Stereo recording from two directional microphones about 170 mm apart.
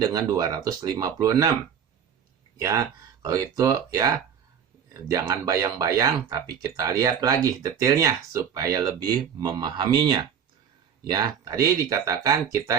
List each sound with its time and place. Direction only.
0.0 s speech: 25° right (ahead or behind)
2.6 s speech: 20° right (ahead or behind)